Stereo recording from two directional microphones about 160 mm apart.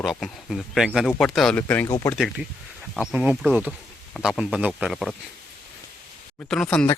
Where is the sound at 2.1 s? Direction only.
Centre (ahead or behind).